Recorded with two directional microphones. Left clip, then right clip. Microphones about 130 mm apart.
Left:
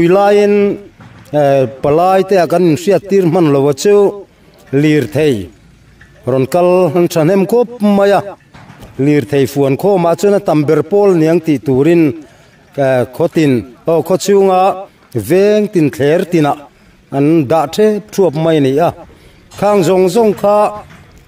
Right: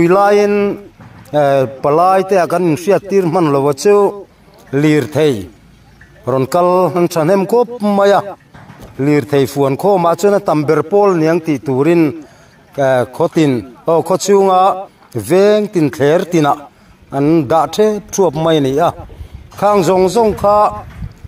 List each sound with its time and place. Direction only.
0.0 s a man's voice: 85° left
4.6 s a man's voice: 70° left (ahead or behind)
6.2 s a man's voice: 85° left
9.0 s a man's voice: 70° left (ahead or behind); by 12.2 s 90° left
12.7 s a man's voice: 80° left
17.1 s a man's voice: 90° left; by 18.9 s 60° left (ahead or behind)
19.6 s a man's voice: 90° left